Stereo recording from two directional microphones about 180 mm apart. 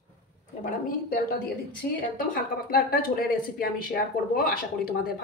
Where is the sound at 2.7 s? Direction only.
55° left (ahead or behind).